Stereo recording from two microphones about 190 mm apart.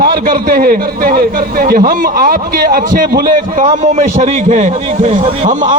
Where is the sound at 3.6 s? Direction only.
35° right (ahead or behind).